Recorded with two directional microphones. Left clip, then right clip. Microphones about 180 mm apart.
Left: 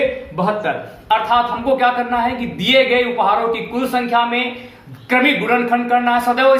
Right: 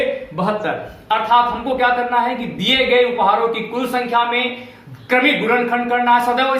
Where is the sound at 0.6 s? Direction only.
20° left (ahead or behind).